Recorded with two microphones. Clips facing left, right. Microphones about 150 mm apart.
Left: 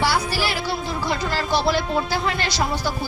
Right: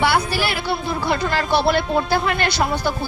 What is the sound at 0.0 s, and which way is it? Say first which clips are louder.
A woman's voice: right 3 dB; 60° right (ahead or behind).